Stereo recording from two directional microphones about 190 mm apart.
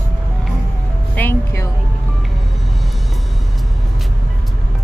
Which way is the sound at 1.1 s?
10° left (ahead or behind).